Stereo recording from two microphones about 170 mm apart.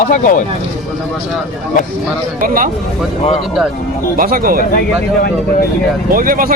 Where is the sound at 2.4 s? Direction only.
55° right (ahead or behind).